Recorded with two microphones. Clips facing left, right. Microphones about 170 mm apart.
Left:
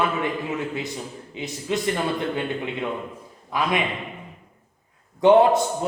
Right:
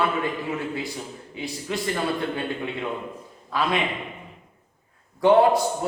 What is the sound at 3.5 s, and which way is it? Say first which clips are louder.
Speech: left 1 dB; 15° left (ahead or behind).